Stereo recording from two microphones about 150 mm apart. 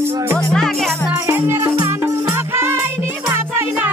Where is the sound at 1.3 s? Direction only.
15° right (ahead or behind).